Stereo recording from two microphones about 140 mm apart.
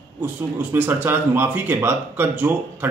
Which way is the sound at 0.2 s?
15° right (ahead or behind).